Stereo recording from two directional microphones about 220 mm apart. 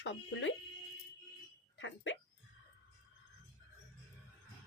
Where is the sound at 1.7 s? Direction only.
60° left (ahead or behind).